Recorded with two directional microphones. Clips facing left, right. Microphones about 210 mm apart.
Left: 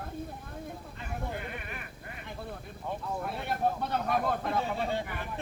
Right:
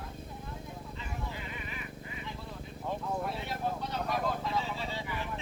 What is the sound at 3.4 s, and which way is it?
Vehicle, 55° left (ahead or behind).